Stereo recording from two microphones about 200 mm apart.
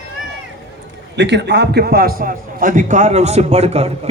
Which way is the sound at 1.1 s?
60° right (ahead or behind).